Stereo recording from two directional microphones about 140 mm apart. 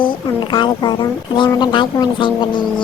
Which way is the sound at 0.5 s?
30° left (ahead or behind).